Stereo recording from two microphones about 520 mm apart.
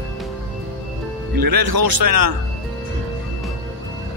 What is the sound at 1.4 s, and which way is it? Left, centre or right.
Speech, right.